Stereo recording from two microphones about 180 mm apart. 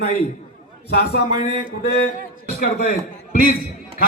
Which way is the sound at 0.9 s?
55° left (ahead or behind).